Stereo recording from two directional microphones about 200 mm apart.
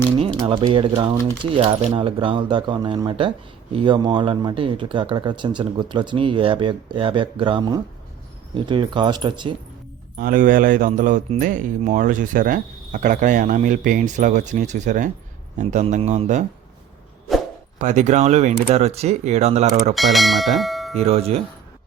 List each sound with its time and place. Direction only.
0.2 s speech: 25° right (ahead or behind)
10.2 s a man's voice: 45° right (ahead or behind)
17.7 s a man's voice: 35° right (ahead or behind)
19.9 s speech: centre (ahead or behind)
21.0 s a man's voice: 30° right (ahead or behind)